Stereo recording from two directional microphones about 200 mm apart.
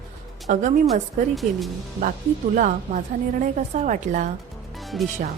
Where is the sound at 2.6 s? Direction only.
40° right (ahead or behind).